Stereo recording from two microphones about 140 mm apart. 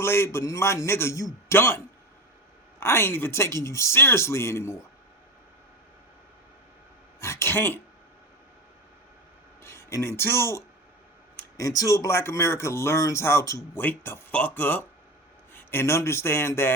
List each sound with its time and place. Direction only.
0.0 s speech: 15° left (ahead or behind)
2.8 s speech: 15° left (ahead or behind)
7.2 s a man's voice: 20° left (ahead or behind)
9.6 s a man's voice: 20° left (ahead or behind)